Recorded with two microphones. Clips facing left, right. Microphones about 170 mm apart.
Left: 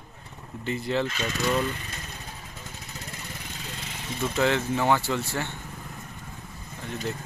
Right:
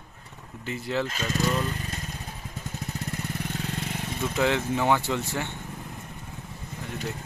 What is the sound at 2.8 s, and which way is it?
Vehicle, 50° right (ahead or behind).